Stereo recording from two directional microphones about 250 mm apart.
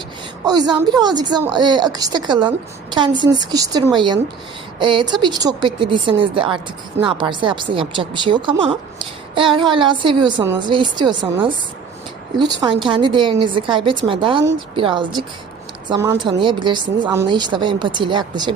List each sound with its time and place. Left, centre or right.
0.4 s a woman's voice: centre